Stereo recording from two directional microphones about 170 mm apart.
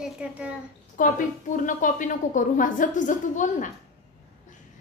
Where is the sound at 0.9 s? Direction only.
50° left (ahead or behind).